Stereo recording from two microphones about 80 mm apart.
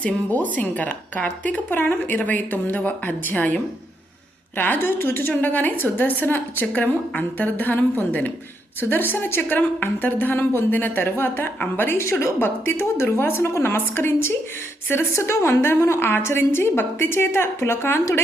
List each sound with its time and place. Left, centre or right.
0.0 s a woman's voice: centre